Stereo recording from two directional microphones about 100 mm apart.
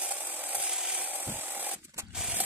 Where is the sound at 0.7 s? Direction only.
10° right (ahead or behind).